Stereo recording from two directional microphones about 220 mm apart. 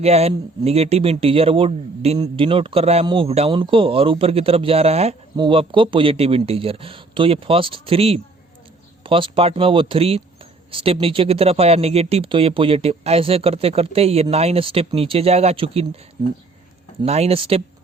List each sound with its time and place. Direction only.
0.0 s a man's voice: 30° right (ahead or behind)
17.0 s a man's voice: 30° right (ahead or behind)